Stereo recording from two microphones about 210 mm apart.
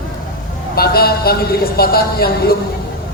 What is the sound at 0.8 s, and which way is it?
Speech, 45° left (ahead or behind).